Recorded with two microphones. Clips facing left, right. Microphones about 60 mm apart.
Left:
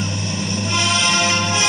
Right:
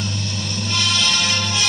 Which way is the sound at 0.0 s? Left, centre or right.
Left.